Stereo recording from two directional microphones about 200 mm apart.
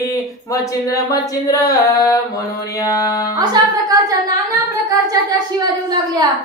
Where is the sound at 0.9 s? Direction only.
15° left (ahead or behind).